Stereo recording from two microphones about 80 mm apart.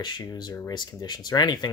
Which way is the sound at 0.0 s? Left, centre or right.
Left.